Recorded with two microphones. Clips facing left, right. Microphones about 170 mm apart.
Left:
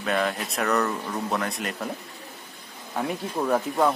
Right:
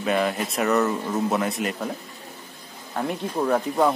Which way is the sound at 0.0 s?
5° right (ahead or behind).